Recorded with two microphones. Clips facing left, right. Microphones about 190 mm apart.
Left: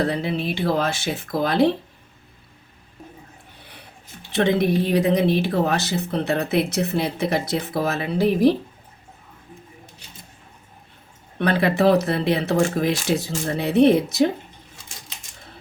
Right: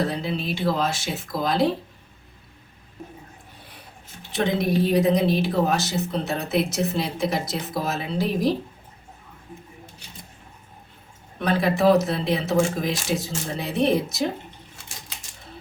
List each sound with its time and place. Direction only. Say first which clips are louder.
0.1 s speech: left 3 dB; 60° left (ahead or behind)
4.3 s speech: left 4 dB; 60° left (ahead or behind)
11.3 s speech: left 2 dB; 65° left (ahead or behind)